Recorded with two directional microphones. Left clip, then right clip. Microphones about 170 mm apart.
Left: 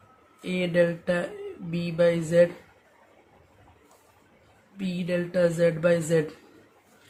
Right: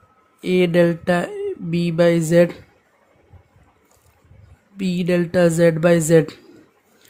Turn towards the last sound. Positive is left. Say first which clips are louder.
# right 8 dB
turn(degrees=-75)  # may be behind; listen again after turning